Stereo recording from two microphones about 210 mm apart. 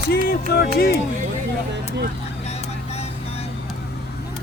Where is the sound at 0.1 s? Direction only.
50° left (ahead or behind).